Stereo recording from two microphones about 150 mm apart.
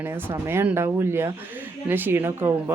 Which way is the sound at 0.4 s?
15° right (ahead or behind).